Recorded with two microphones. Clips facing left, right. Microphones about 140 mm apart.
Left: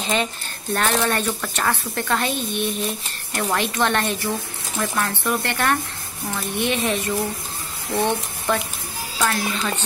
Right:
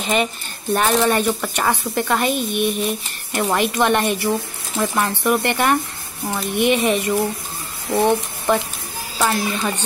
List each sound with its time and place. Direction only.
0.7 s a woman's voice: 15° right (ahead or behind)